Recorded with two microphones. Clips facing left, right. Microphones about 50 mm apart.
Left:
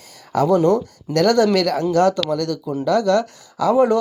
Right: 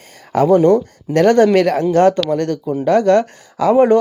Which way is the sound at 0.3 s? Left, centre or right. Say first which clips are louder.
Right 4 dB; right.